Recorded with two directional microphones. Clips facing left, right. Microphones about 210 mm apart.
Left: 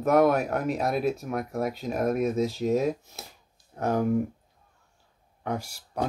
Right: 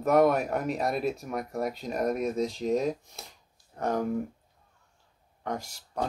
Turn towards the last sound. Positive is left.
turn(degrees=10)  # may be behind; listen again after turning